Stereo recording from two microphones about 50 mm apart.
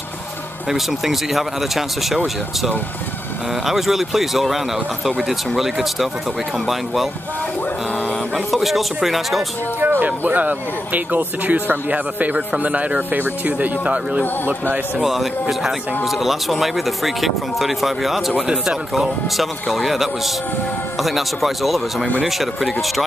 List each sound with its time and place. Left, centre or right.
0.7 s speech: centre
3.6 s speech: centre
5.6 s speech: centre
8.5 s speech: centre
9.8 s a man's voice: right
15.0 s speech: centre